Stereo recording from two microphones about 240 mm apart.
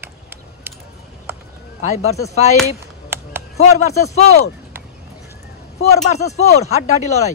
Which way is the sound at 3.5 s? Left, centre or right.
Left.